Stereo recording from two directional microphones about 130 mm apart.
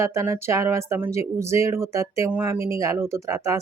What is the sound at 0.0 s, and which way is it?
Speech, 20° right (ahead or behind).